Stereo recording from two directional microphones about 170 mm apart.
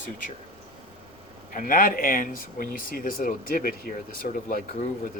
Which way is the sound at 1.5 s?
55° left (ahead or behind).